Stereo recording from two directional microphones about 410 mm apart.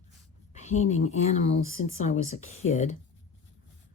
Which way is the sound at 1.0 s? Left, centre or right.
Centre.